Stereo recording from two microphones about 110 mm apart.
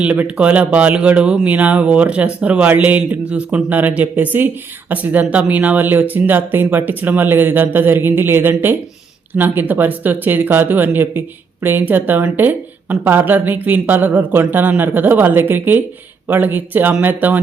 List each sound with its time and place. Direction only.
0.0 s speech: 10° right (ahead or behind)